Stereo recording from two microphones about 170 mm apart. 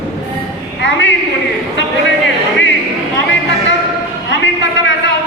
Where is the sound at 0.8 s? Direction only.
90° left.